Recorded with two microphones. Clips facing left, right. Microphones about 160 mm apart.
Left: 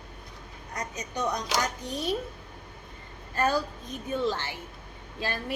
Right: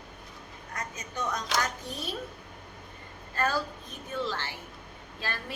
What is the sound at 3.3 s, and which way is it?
A woman's voice, 20° left (ahead or behind).